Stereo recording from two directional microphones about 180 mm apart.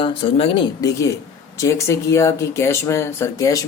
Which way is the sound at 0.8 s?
15° left (ahead or behind).